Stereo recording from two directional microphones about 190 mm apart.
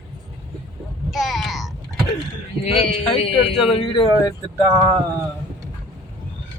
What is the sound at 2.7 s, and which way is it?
A man's voice, 30° left (ahead or behind).